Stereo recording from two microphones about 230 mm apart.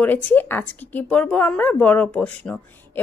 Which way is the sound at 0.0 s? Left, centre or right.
Centre.